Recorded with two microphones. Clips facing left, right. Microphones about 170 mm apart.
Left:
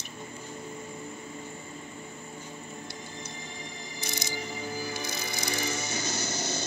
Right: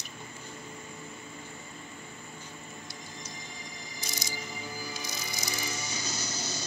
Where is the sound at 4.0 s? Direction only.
60° left (ahead or behind).